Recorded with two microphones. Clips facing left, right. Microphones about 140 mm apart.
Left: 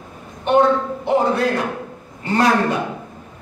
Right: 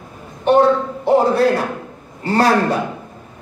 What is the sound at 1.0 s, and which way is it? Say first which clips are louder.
A man's voice: right 5 dB; 35° right (ahead or behind).